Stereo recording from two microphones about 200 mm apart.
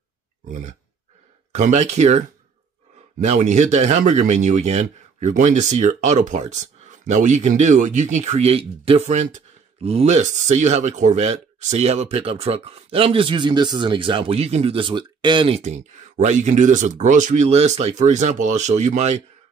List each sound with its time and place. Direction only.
0.5 s speech: 35° right (ahead or behind)